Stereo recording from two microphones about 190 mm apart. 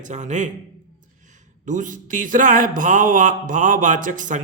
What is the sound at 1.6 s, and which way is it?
Speech, 40° right (ahead or behind).